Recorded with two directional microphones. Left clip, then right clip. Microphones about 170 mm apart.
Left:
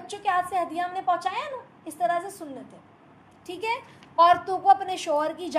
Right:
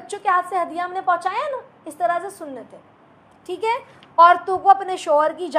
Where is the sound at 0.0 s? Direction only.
20° right (ahead or behind).